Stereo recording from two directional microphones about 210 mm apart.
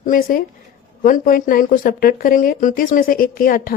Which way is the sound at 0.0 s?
40° left (ahead or behind).